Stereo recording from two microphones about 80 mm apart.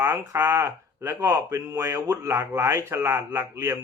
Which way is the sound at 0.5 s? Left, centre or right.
Right.